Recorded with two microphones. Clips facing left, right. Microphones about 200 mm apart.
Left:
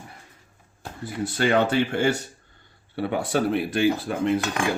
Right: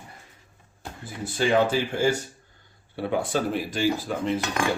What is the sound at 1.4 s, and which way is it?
Speech, 65° left (ahead or behind).